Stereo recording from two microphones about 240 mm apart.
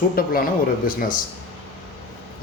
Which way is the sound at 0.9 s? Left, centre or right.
Left.